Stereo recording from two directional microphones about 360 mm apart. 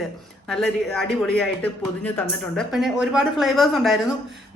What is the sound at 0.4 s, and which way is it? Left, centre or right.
Speech, centre.